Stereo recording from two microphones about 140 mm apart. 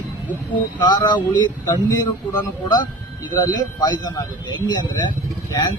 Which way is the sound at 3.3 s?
25° left (ahead or behind).